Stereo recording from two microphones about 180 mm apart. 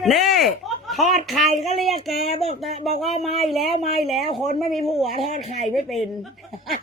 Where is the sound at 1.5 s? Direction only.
35° right (ahead or behind).